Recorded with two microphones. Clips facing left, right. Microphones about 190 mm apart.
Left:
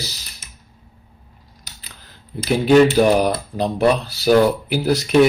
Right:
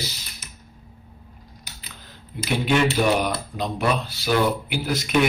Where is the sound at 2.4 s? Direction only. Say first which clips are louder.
Left 8 dB; 35° left (ahead or behind).